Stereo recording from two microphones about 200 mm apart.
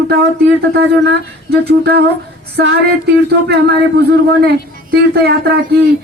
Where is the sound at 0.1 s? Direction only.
55° right (ahead or behind).